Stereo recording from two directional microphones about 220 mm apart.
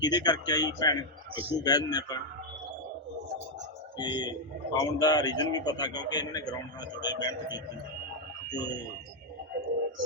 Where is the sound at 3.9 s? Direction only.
20° left (ahead or behind).